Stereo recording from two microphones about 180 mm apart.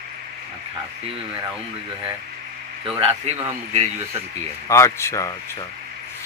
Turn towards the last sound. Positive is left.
turn(degrees=15)  # may be behind; listen again after turning